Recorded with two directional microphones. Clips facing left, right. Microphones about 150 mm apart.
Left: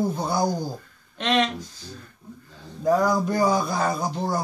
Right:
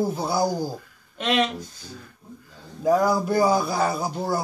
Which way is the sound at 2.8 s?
10° right (ahead or behind).